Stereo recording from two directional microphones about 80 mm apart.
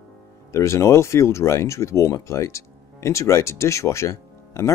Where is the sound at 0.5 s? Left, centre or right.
Left.